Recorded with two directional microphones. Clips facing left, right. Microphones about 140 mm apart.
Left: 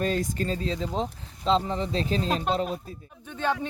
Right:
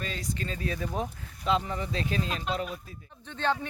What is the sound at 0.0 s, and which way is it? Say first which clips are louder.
Speech: left 8 dB; 45° left (ahead or behind).